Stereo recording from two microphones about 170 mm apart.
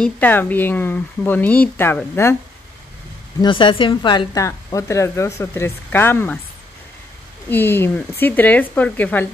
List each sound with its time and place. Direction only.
0.0 s a woman's voice: 10° left (ahead or behind)
3.3 s a woman's voice: 30° left (ahead or behind); by 6.3 s 10° left (ahead or behind)
7.4 s a woman's voice: 10° left (ahead or behind)